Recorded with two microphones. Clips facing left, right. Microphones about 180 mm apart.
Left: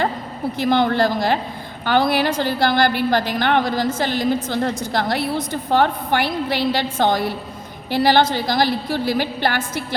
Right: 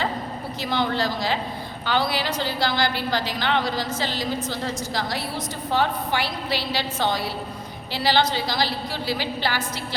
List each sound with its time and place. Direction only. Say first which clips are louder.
0.6 s a woman's voice: left 7 dB; 55° left (ahead or behind)